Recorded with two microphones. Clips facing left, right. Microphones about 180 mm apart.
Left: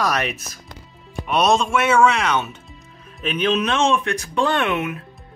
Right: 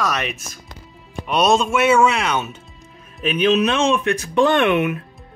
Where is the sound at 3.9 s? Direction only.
20° right (ahead or behind).